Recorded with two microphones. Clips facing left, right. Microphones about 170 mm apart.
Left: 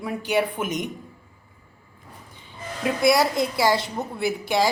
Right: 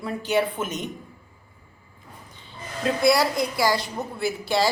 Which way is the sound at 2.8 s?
20° left (ahead or behind).